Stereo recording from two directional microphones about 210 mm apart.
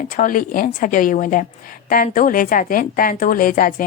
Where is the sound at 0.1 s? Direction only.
40° left (ahead or behind).